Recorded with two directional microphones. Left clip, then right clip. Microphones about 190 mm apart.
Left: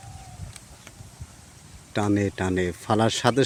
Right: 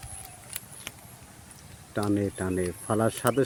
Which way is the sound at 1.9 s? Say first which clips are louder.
Left 4 dB; 40° left (ahead or behind).